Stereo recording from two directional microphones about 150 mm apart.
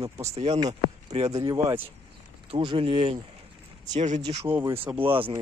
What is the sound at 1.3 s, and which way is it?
Speech, 25° right (ahead or behind).